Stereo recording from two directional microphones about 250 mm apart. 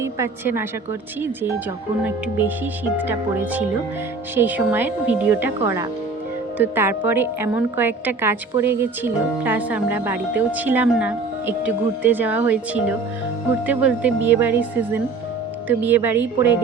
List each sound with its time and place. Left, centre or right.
0.0 s a woman's voice: centre